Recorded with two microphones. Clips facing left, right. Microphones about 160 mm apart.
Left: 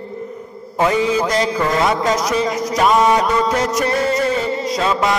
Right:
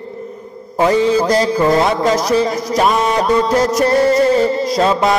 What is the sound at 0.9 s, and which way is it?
Music, 35° right (ahead or behind).